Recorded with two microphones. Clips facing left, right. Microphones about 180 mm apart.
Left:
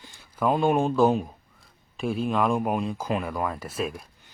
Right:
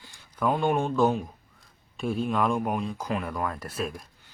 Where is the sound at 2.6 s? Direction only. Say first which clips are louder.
Left 2 dB; 15° left (ahead or behind).